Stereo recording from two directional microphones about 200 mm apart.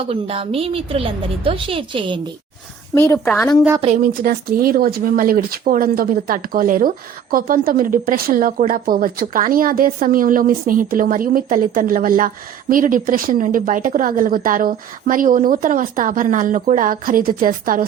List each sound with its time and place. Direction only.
0.1 s a woman's voice: 30° right (ahead or behind)
2.9 s a woman's voice: 10° left (ahead or behind)
3.8 s a woman's voice: 30° right (ahead or behind)
4.0 s speech: 45° right (ahead or behind)